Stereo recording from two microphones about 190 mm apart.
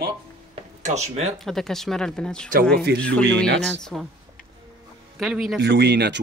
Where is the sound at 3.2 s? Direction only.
65° right (ahead or behind).